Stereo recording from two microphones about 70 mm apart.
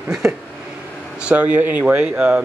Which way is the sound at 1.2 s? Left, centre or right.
Centre.